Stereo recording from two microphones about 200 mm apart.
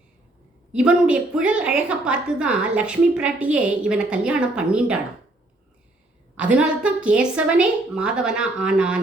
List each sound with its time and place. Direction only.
0.7 s a woman's voice: 5° right (ahead or behind)
6.3 s a woman's voice: 5° right (ahead or behind)